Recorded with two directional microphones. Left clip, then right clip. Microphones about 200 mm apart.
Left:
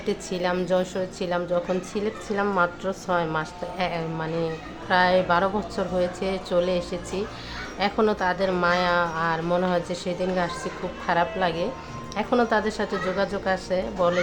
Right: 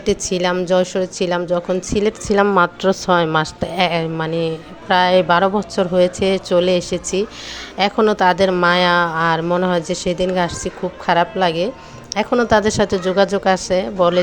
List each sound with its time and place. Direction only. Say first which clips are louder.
0.0 s a woman's voice: right 9 dB; 35° right (ahead or behind)